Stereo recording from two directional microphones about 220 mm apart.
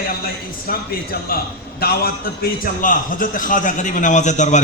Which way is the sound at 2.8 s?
40° left (ahead or behind).